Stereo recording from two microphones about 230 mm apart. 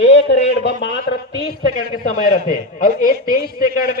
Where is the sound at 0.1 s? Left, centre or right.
Left.